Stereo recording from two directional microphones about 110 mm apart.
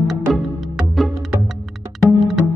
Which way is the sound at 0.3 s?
Centre (ahead or behind).